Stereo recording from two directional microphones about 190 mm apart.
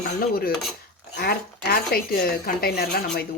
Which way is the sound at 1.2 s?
55° left (ahead or behind).